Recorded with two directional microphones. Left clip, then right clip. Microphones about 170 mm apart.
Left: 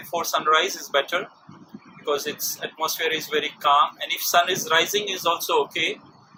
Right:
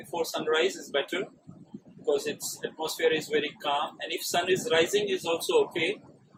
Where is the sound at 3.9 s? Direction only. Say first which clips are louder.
Left 9 dB; 15° right (ahead or behind).